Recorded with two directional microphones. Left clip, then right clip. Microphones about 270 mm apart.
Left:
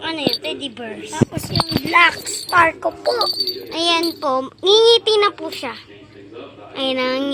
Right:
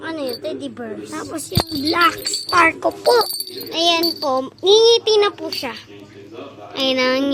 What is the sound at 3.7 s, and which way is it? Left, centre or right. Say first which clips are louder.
Speech: right 2 dB; centre.